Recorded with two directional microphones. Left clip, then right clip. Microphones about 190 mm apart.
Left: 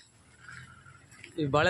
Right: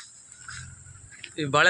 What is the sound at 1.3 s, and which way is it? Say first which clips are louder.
Speech: right 5 dB; 5° left (ahead or behind).